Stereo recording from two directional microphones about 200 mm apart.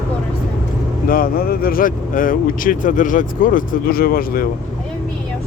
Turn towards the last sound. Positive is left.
turn(degrees=50)  # may be behind; listen again after turning